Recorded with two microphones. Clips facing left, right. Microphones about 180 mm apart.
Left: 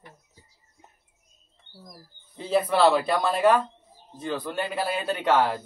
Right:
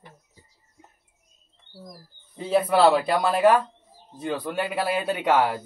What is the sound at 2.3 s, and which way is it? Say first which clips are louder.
Speech: right 2 dB; 5° right (ahead or behind).